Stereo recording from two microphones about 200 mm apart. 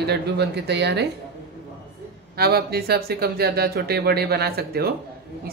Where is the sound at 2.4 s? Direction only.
50° right (ahead or behind).